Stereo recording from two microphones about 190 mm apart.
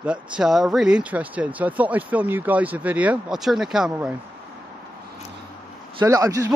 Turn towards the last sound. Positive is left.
turn(degrees=-20)  # may be behind; listen again after turning